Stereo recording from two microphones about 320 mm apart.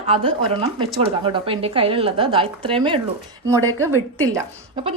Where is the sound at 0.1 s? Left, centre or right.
Centre.